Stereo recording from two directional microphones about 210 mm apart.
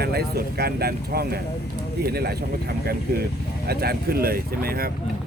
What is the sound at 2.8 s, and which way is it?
Speech, 50° right (ahead or behind).